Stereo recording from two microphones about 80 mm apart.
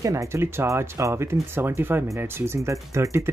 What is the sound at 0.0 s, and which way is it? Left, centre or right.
Speech, right.